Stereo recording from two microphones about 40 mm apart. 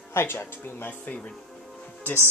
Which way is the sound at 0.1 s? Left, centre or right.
Left.